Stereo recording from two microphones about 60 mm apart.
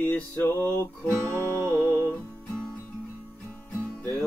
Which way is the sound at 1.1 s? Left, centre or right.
Right.